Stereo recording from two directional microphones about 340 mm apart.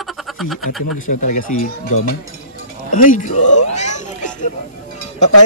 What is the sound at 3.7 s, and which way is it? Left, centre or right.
Cat, centre.